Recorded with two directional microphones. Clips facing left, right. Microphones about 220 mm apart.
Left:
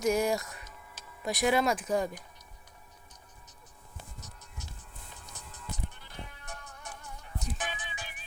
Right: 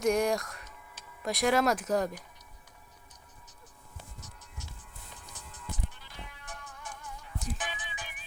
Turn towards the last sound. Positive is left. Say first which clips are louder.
# left 1 dB
turn(degrees=45)  # may be behind; listen again after turning